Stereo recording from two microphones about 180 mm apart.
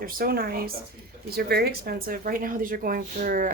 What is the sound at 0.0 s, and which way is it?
Speech, 55° right (ahead or behind).